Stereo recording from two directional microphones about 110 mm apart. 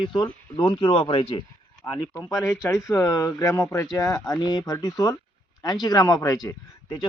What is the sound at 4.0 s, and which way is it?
Speech, 35° left (ahead or behind).